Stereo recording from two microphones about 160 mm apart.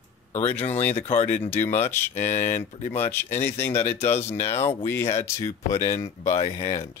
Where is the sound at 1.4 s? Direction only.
15° left (ahead or behind).